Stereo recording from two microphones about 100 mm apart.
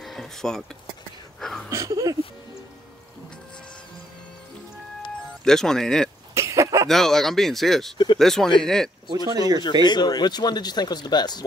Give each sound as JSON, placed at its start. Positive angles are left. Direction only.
{"t": 0.0, "sound": "speech", "side_deg": 5}
{"t": 1.4, "sound": "a sound", "side_deg": 5}
{"t": 1.7, "sound": "a sound", "side_deg": -30}
{"t": 5.4, "sound": "speech", "side_deg": 5}
{"t": 6.3, "sound": "cough", "side_deg": -30}
{"t": 6.9, "sound": "speech", "side_deg": 5}
{"t": 9.0, "sound": "speech", "side_deg": -40}
{"t": 9.8, "sound": "speech", "side_deg": 45}